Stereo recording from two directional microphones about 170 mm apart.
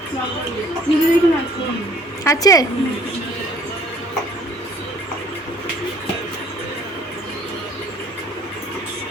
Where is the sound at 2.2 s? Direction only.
20° left (ahead or behind).